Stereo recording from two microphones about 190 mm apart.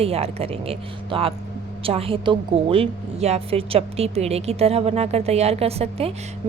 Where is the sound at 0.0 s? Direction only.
30° right (ahead or behind).